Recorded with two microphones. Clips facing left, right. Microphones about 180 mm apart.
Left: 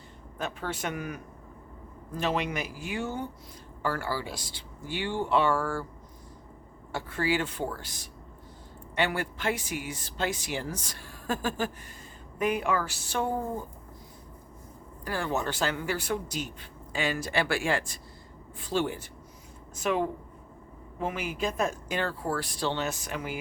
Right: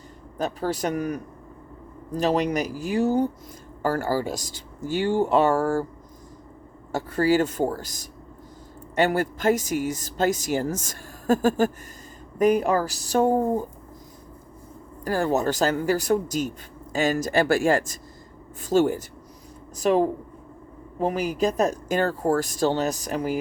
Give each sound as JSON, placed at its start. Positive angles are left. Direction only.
{"t": 0.3, "sound": "speech", "side_deg": -40}
{"t": 6.9, "sound": "speech", "side_deg": -40}
{"t": 15.0, "sound": "speech", "side_deg": -40}